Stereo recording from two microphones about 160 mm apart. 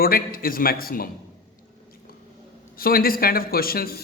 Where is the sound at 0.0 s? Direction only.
65° left (ahead or behind).